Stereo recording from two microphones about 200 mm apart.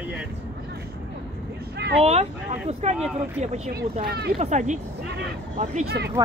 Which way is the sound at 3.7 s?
50° right (ahead or behind).